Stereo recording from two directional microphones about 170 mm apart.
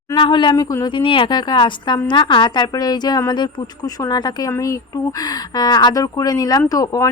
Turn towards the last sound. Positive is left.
turn(degrees=20)  # may be behind; listen again after turning